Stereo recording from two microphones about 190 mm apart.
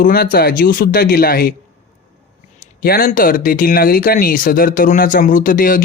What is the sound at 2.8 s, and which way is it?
Speech, 50° left (ahead or behind).